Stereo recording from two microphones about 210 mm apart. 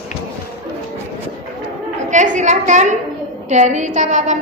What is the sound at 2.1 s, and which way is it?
A woman's voice, 35° right (ahead or behind).